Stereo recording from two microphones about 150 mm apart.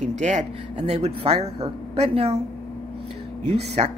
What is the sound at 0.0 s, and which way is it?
Speech, 50° right (ahead or behind).